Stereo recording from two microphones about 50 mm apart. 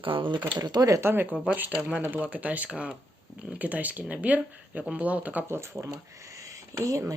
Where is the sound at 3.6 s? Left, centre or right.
Right.